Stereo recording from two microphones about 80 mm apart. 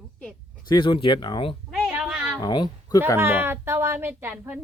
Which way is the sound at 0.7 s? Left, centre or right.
Left.